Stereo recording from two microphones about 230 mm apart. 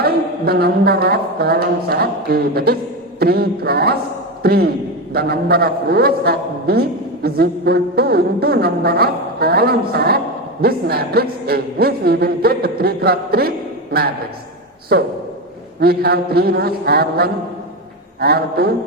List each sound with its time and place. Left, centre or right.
0.0 s a man's voice: right
15.8 s a man's voice: right